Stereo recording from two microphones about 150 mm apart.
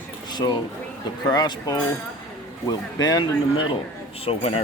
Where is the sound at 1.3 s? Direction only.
25° left (ahead or behind).